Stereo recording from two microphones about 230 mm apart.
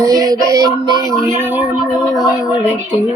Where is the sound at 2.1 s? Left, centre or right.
Centre.